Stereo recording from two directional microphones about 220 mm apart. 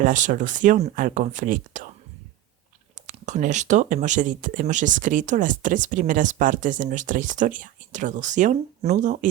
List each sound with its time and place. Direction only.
0.0 s speech: 35° right (ahead or behind)
2.9 s speech: 35° right (ahead or behind)